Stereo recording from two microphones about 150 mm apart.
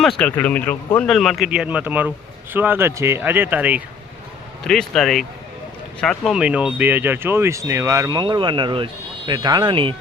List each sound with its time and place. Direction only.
0.2 s a man's voice: 10° left (ahead or behind); by 3.8 s 10° right (ahead or behind)
4.6 s speech: 5° left (ahead or behind); by 9.9 s 30° right (ahead or behind)